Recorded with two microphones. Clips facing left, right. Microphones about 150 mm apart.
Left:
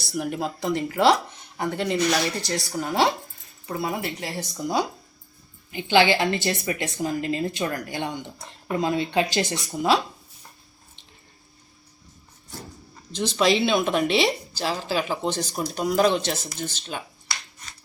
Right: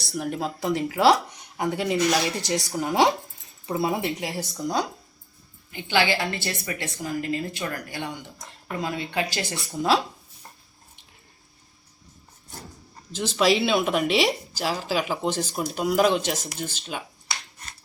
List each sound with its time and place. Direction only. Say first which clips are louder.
0.0 s a woman's voice: left 1 dB; 5° left (ahead or behind); by 4.4 s 15° right (ahead or behind)
4.5 s speech: left 2 dB; 5° left (ahead or behind)
5.7 s a woman's voice: left 4 dB; 20° left (ahead or behind)
13.1 s speech: even; 5° right (ahead or behind)